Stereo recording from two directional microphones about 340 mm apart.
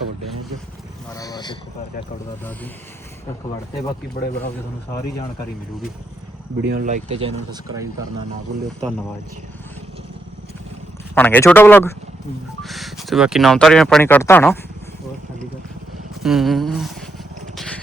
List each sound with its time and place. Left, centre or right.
1.1 s speech: centre
6.7 s speech: right
11.1 s speech: centre
16.2 s speech: centre